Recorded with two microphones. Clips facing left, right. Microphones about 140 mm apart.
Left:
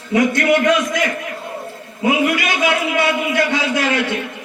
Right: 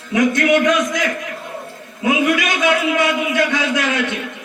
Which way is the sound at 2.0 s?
25° left (ahead or behind).